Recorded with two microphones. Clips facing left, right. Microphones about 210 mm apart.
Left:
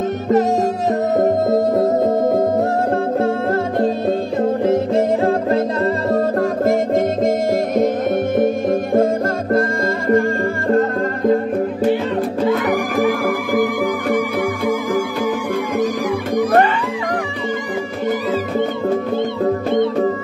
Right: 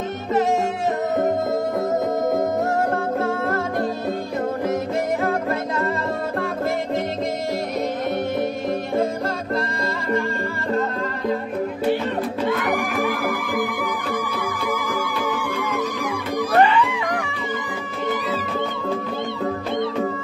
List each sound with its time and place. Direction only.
1.1 s music: 35° left (ahead or behind)
4.6 s music: 30° left (ahead or behind)
6.1 s music: 45° left (ahead or behind)
16.5 s music: 45° left (ahead or behind)